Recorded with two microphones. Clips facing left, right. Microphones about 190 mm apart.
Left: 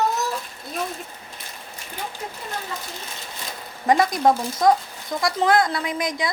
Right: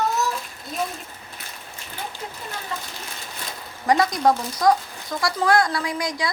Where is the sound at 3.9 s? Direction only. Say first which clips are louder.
Left 1 dB; 20° left (ahead or behind).